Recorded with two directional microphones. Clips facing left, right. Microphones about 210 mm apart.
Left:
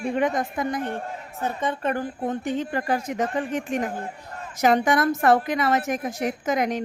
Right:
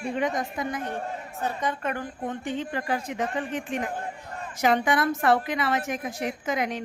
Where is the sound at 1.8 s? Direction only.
35° left (ahead or behind).